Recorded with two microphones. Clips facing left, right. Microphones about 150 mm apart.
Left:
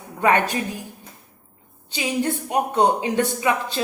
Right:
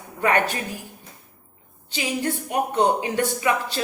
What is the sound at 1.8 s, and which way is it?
Speech, 15° left (ahead or behind).